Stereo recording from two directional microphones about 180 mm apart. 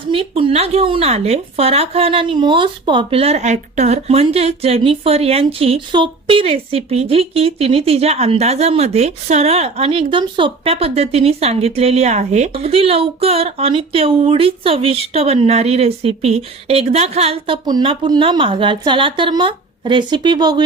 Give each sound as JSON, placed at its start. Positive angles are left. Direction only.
{"t": 0.1, "sound": "speech", "side_deg": -30}